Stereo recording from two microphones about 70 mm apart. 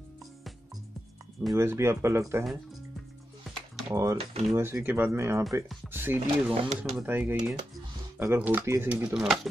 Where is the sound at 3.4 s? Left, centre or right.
Centre.